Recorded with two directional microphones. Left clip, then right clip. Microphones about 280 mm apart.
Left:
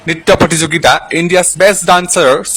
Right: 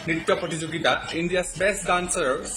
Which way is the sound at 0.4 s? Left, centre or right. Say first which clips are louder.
Left 15 dB; left.